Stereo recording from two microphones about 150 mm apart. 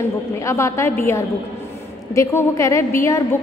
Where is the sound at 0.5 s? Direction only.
20° left (ahead or behind).